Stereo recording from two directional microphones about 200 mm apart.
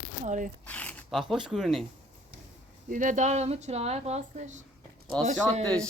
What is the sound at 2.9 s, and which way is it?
Speech, 40° right (ahead or behind).